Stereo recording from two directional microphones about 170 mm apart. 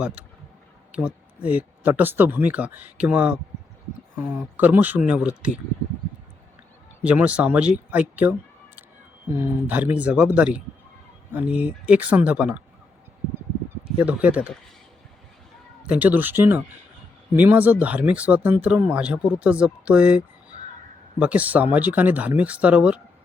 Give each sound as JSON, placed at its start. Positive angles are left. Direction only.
{"t": 0.0, "sound": "speech", "side_deg": -5}
{"t": 7.0, "sound": "speech", "side_deg": -5}
{"t": 14.0, "sound": "speech", "side_deg": -10}
{"t": 15.8, "sound": "speech", "side_deg": -10}